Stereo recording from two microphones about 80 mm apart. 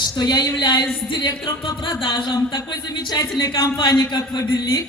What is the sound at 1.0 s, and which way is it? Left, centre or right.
Music, left.